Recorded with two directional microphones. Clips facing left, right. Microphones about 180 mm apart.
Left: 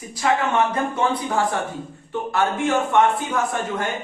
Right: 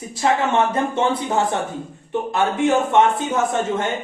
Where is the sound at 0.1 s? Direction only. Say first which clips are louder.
Right 2 dB; 25° right (ahead or behind).